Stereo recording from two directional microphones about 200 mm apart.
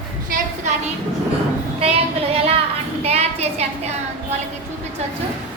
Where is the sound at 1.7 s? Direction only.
30° right (ahead or behind).